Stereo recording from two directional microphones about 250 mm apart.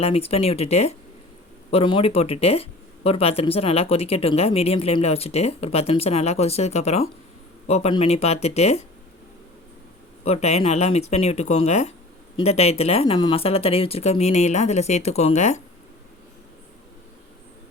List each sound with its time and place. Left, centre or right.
0.0 s speech: left
10.2 s speech: left